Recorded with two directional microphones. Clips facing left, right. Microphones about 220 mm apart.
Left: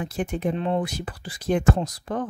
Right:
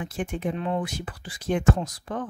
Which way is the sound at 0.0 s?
40° left (ahead or behind).